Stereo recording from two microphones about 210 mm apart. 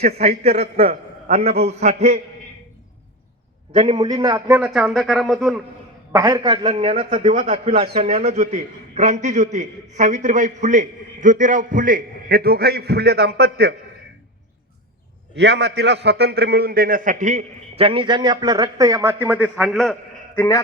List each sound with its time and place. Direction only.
0.0 s a man's voice: 30° right (ahead or behind)
3.7 s a man's voice: 25° right (ahead or behind); by 5.6 s centre (ahead or behind)
6.1 s a man's voice: 15° right (ahead or behind); by 13.7 s 50° right (ahead or behind)
15.4 s a man's voice: 55° right (ahead or behind); by 20.4 s centre (ahead or behind)